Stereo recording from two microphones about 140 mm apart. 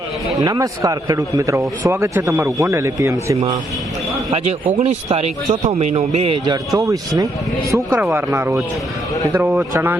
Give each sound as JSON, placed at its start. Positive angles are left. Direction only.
{"t": 0.4, "sound": "a man's voice", "side_deg": -30}
{"t": 4.4, "sound": "speech", "side_deg": -50}
{"t": 6.7, "sound": "a man's voice", "side_deg": -25}
{"t": 7.7, "sound": "speech", "side_deg": -10}